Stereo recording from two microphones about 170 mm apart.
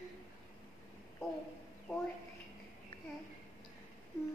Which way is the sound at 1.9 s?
10° left (ahead or behind).